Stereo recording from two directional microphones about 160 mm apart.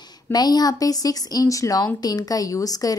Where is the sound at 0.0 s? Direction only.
25° left (ahead or behind).